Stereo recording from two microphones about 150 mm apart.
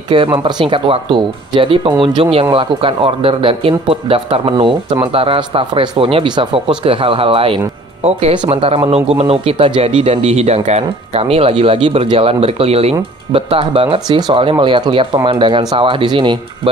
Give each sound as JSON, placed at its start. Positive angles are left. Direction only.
{"t": 0.1, "sound": "speech", "side_deg": -35}